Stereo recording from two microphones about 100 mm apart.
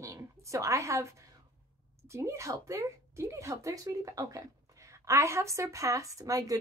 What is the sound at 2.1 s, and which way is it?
A woman's voice, 30° right (ahead or behind).